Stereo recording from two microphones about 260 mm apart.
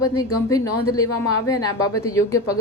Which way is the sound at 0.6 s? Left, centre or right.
Left.